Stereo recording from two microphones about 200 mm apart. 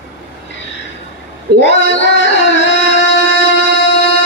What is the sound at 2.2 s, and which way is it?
Music, 65° left (ahead or behind).